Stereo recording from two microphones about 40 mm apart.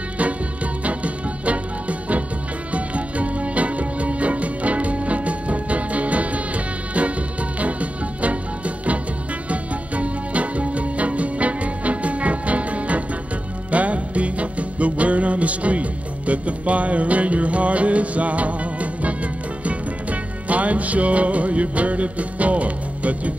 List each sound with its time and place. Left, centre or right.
0.8 s music: right